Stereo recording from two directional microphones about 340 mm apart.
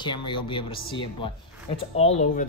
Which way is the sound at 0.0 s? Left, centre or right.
Centre.